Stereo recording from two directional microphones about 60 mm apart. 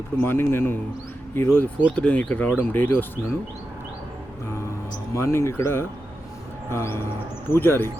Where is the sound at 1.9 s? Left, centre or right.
Left.